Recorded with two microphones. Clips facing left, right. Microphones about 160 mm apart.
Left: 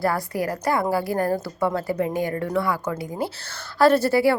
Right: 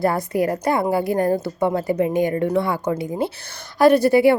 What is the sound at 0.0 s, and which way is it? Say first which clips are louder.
A woman's voice: right 4 dB; 20° right (ahead or behind).